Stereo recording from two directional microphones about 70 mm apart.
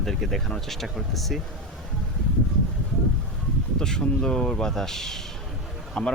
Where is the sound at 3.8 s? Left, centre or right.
Centre.